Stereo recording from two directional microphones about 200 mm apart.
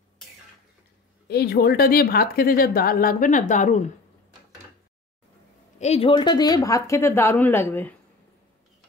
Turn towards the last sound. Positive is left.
turn(degrees=10)  # may be behind; listen again after turning